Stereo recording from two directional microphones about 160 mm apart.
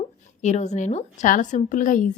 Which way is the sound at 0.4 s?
45° left (ahead or behind).